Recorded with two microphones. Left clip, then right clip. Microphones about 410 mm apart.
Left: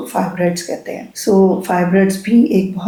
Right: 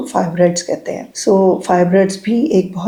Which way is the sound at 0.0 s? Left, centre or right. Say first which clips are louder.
Right 4 dB; right.